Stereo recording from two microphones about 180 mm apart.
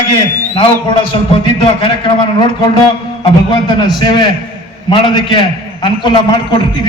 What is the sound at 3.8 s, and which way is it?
A man's voice, 25° left (ahead or behind).